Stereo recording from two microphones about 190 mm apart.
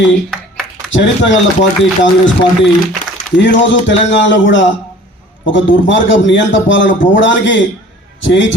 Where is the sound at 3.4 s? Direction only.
75° left (ahead or behind).